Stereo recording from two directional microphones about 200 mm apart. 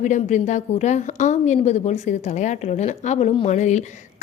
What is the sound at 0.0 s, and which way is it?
A woman's voice, 40° left (ahead or behind).